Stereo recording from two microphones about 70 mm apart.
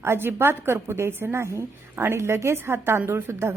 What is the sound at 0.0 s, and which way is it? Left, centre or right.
A woman's voice, right.